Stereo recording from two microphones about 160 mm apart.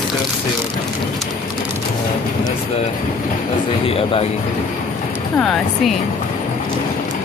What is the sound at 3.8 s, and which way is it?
Speech, 35° left (ahead or behind).